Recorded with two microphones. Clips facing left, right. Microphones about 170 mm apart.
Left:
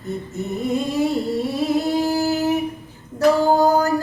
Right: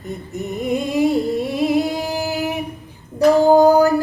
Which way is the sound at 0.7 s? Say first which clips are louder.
Right 4 dB; 15° right (ahead or behind).